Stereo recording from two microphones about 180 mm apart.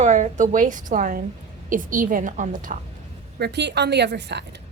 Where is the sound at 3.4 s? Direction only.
70° right (ahead or behind).